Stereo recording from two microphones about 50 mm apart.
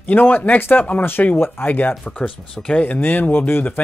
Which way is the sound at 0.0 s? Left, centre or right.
Left.